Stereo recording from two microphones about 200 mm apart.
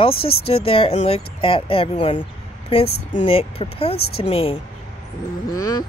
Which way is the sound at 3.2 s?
30° left (ahead or behind).